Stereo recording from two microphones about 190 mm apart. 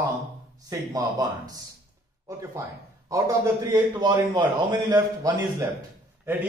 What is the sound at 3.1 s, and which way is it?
A man's voice, 20° right (ahead or behind).